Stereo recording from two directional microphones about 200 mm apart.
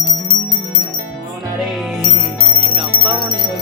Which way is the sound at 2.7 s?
25° right (ahead or behind).